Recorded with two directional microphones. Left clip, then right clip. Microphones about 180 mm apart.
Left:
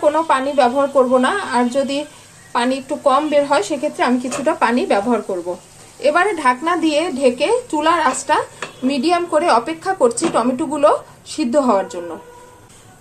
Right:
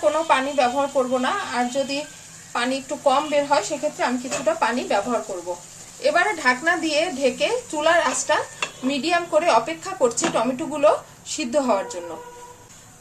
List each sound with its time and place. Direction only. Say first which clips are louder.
0.0 s a woman's voice: left 4 dB; 35° left (ahead or behind)
5.9 s a woman's voice: left 4 dB; 25° left (ahead or behind)